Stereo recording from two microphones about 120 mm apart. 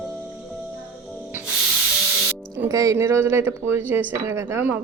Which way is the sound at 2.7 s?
30° right (ahead or behind).